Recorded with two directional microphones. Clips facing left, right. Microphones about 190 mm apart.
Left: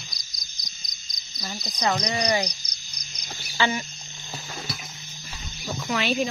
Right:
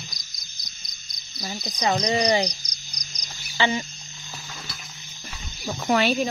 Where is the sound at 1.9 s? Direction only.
30° right (ahead or behind).